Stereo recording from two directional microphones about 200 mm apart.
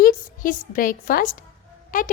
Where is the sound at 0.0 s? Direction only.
45° left (ahead or behind).